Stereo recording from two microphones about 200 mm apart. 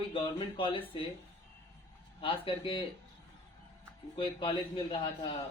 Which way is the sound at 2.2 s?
25° left (ahead or behind).